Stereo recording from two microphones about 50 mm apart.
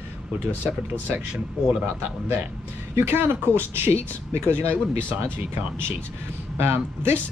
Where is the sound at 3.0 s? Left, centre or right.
Right.